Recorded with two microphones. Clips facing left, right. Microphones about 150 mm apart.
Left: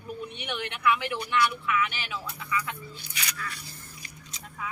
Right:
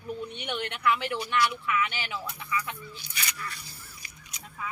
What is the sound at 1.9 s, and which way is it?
Speech, 20° right (ahead or behind).